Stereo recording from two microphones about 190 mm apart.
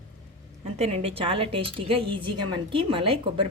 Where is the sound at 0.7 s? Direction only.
30° right (ahead or behind).